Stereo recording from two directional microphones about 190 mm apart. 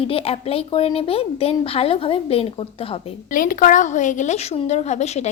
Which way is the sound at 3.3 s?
45° left (ahead or behind).